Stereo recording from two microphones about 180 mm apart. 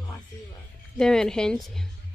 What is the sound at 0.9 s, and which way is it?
Speech, 5° left (ahead or behind).